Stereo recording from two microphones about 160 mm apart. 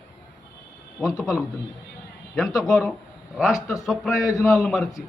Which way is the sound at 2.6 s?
Centre (ahead or behind).